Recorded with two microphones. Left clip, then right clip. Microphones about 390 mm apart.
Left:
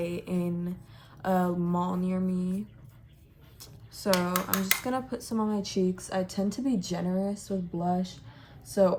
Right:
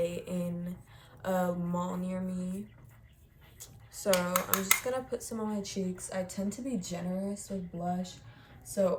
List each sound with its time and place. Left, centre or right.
0.0 s a sound: centre
1.2 s speech: centre
3.6 s speech: centre
7.3 s speech: centre